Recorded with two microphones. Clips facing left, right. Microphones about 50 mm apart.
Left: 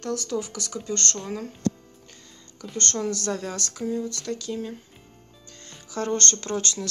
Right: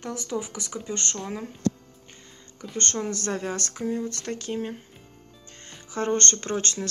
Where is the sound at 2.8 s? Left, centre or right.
Right.